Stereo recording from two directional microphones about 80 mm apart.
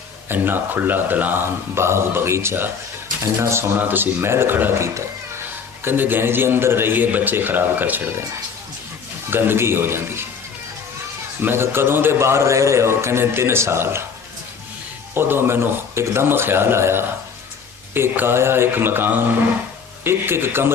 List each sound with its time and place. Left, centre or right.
0.3 s speech: right
9.3 s speech: right
11.4 s a man's voice: right
15.1 s speech: right